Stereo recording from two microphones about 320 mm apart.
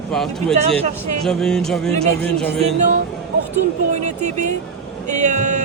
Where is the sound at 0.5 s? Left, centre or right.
Centre.